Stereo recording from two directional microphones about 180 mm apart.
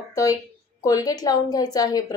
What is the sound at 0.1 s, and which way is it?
A woman's voice, 20° left (ahead or behind).